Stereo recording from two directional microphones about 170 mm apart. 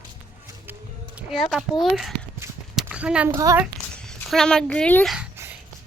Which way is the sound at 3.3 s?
20° right (ahead or behind).